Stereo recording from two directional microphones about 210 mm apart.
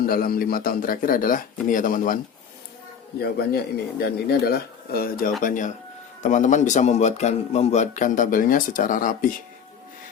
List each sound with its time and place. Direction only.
0.0 s speech: 45° left (ahead or behind)
3.2 s speech: 50° left (ahead or behind)